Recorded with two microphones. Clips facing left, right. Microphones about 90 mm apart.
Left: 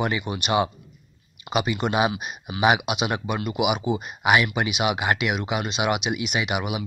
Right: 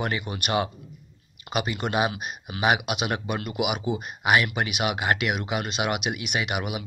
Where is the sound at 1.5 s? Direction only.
20° left (ahead or behind).